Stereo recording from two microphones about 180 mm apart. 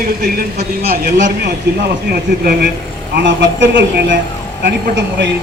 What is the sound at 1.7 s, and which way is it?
Speech, 65° right (ahead or behind).